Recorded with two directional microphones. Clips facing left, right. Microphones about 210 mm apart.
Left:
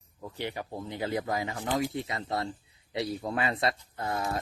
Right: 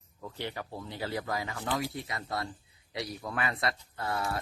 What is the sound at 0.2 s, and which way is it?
Speech, 15° left (ahead or behind).